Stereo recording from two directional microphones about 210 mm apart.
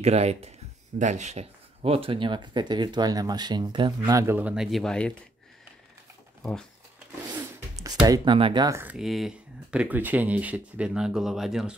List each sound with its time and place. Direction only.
0.0 s speech: 30° right (ahead or behind); by 5.1 s 5° left (ahead or behind)
7.2 s speech: 15° right (ahead or behind)